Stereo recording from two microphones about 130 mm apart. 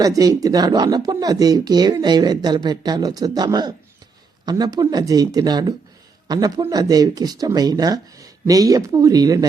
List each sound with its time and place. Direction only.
0.0 s a man's voice: 25° right (ahead or behind)